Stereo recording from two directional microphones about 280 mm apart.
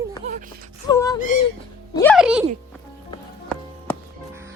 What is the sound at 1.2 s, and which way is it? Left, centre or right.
Speech, left.